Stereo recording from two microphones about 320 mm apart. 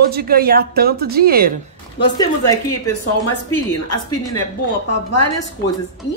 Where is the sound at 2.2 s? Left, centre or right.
Centre.